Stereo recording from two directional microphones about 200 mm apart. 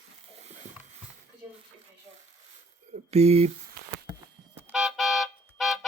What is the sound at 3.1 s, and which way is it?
Speech, 30° right (ahead or behind).